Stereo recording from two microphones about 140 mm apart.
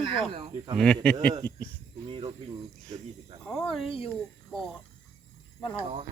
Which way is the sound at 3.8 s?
40° left (ahead or behind).